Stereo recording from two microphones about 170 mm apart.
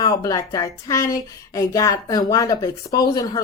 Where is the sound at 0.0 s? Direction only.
20° left (ahead or behind).